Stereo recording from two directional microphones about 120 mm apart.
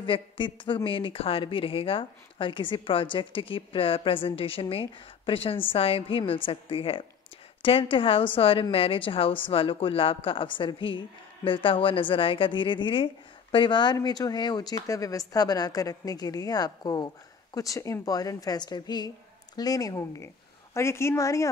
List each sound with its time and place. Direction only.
0.0 s a woman's voice: 45° left (ahead or behind); by 21.5 s 25° left (ahead or behind)